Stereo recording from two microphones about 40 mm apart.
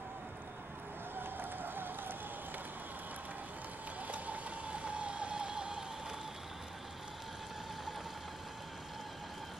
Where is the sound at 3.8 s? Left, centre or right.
Right; by 6.2 s centre.